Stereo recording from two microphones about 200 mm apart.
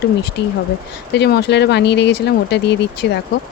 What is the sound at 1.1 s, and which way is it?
Speech, 55° left (ahead or behind).